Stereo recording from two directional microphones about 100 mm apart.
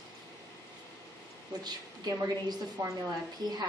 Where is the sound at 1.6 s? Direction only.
45° right (ahead or behind).